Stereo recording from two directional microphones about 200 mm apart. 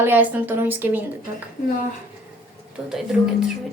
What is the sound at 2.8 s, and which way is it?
Speech, 5° right (ahead or behind).